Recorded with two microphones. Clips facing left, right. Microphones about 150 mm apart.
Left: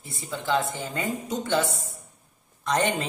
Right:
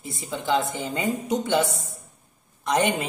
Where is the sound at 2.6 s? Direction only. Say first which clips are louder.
Right 2 dB; 15° right (ahead or behind).